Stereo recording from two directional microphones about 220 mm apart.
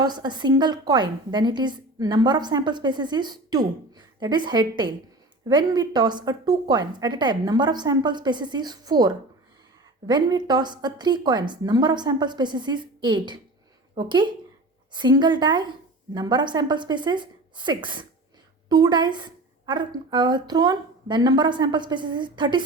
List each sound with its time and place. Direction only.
0.0 s a woman's voice: 20° right (ahead or behind)